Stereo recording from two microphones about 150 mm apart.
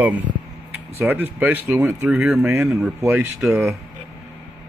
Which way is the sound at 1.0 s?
15° right (ahead or behind).